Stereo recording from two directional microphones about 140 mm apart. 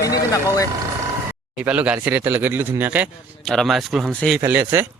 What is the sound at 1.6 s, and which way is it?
Speech, 10° right (ahead or behind).